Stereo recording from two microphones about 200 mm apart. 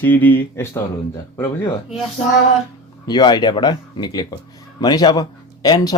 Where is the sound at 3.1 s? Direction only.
20° left (ahead or behind).